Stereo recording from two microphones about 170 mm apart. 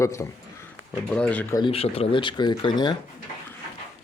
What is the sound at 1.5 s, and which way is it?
Speech, 30° left (ahead or behind).